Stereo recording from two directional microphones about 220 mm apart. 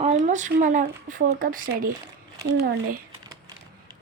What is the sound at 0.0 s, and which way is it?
Speech, 30° right (ahead or behind).